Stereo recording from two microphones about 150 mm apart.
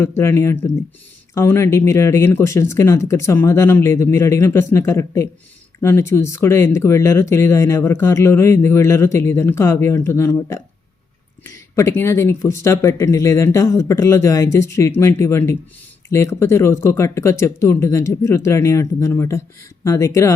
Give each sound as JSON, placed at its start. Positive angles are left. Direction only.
{"t": 0.0, "sound": "speech", "side_deg": 15}